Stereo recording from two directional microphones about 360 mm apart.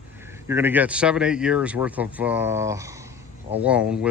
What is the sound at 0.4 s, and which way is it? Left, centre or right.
Speech, centre.